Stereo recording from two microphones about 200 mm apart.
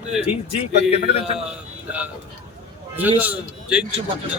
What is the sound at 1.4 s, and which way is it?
Speech, 5° right (ahead or behind).